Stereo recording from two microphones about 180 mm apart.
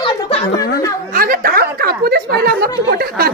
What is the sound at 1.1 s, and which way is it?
A woman's voice, 55° right (ahead or behind).